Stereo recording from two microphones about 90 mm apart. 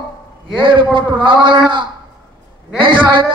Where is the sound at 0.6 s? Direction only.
70° right (ahead or behind).